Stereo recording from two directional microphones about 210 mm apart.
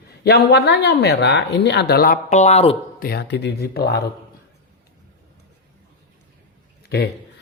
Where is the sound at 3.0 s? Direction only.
50° left (ahead or behind).